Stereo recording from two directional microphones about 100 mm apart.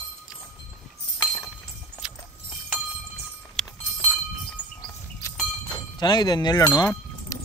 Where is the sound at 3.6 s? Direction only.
5° left (ahead or behind).